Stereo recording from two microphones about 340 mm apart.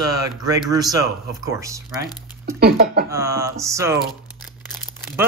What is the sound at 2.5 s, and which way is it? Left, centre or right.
Speech, right.